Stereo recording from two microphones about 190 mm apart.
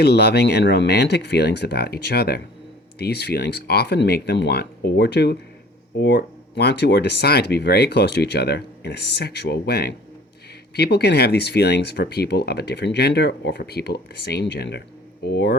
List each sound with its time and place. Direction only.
0.0 s speech: 60° left (ahead or behind)